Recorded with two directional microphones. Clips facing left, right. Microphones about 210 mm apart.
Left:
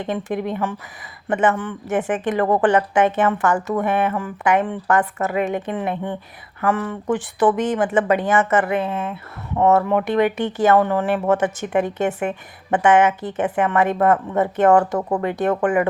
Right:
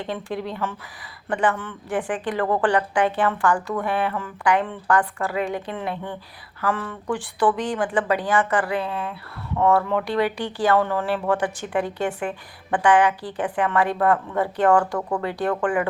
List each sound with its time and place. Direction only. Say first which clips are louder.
0.0 s a woman's voice: left 5 dB; 20° left (ahead or behind)